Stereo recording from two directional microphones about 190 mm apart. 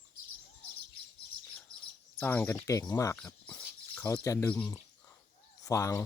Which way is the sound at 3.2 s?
10° left (ahead or behind).